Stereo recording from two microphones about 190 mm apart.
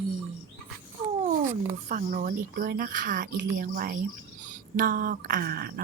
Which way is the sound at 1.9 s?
45° right (ahead or behind).